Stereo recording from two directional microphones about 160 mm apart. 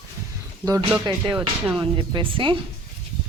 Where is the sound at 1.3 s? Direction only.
5° right (ahead or behind).